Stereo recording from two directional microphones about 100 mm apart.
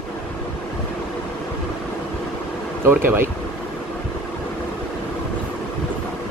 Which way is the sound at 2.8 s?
20° right (ahead or behind).